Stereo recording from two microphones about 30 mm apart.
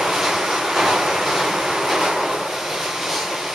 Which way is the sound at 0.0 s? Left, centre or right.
Centre.